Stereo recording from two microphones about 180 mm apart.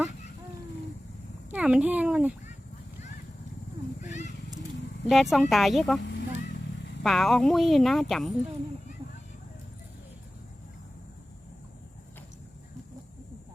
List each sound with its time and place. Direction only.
1.5 s speech: 5° right (ahead or behind)
4.0 s cat: 40° left (ahead or behind)
5.0 s speech: centre (ahead or behind)
6.0 s vehicle: 80° left
7.0 s speech: centre (ahead or behind)